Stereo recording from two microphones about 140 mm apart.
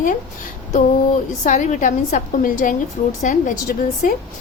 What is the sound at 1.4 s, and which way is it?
A woman's voice, 65° left (ahead or behind).